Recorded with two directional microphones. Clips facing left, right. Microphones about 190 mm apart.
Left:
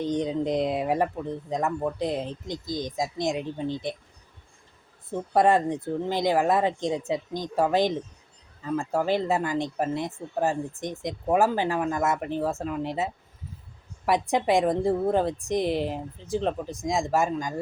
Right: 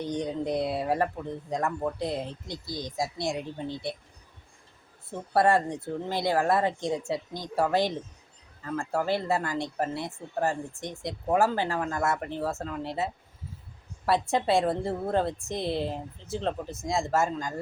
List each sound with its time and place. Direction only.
0.0 s speech: 20° left (ahead or behind)
5.3 s speech: 15° left (ahead or behind)